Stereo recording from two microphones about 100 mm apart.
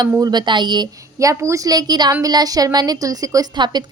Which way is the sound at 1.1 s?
30° right (ahead or behind).